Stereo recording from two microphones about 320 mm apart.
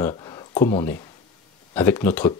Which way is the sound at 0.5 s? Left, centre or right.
Left.